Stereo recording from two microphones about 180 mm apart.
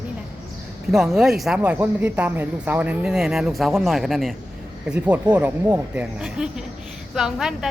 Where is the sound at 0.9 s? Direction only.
Centre (ahead or behind).